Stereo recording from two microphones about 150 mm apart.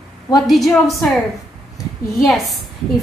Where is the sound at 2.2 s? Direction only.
Centre (ahead or behind).